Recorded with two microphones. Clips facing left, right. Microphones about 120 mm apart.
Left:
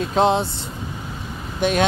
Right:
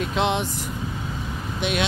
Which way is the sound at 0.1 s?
35° left (ahead or behind).